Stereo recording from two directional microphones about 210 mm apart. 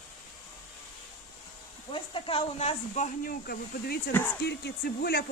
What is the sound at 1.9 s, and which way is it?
Speech, 25° left (ahead or behind).